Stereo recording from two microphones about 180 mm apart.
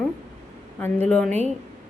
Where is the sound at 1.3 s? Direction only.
40° right (ahead or behind).